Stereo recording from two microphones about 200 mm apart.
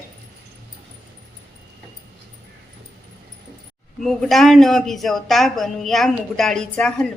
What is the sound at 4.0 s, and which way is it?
Speech, centre (ahead or behind).